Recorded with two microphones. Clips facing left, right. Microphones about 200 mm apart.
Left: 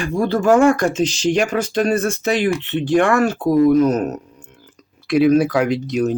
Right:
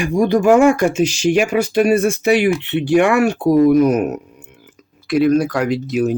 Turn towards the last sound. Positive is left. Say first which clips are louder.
# right 1 dB
turn(degrees=-5)  # may be behind; listen again after turning